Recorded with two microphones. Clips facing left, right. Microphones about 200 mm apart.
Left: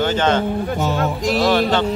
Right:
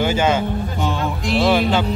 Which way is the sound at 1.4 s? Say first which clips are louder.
Right 1 dB; 10° right (ahead or behind).